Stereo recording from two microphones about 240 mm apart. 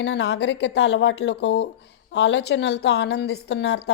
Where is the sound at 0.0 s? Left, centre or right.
Left.